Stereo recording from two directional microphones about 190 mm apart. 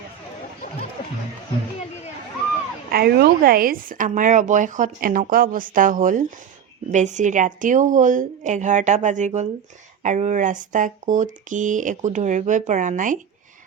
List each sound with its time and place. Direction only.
2.9 s speech: 55° right (ahead or behind)